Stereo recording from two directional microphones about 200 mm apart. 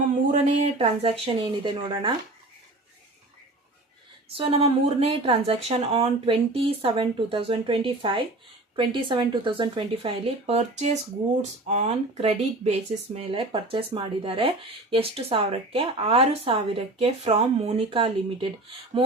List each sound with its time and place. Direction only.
0.3 s speech: 30° right (ahead or behind)
4.4 s speech: 30° right (ahead or behind)